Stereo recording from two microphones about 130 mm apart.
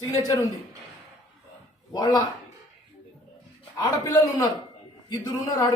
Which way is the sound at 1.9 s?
30° left (ahead or behind).